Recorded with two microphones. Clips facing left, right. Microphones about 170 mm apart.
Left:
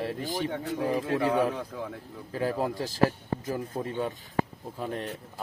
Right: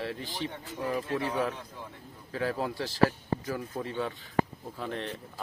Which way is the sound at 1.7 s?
90° left.